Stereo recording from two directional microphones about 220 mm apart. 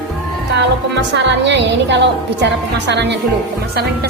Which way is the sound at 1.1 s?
55° right (ahead or behind).